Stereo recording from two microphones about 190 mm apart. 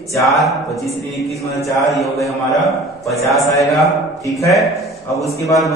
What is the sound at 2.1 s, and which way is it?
Speech, 20° left (ahead or behind).